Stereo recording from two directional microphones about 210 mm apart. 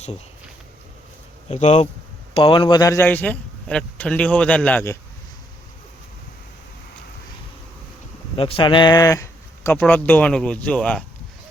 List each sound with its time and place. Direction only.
1.5 s speech: 30° left (ahead or behind); by 4.9 s 10° left (ahead or behind)
8.4 s speech: 25° left (ahead or behind); by 11.0 s 5° left (ahead or behind)